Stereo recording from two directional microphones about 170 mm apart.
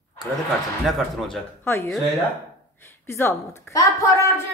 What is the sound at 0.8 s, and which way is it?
Speech, centre (ahead or behind).